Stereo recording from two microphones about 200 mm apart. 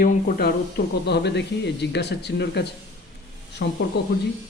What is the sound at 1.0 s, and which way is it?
Speech, 55° left (ahead or behind).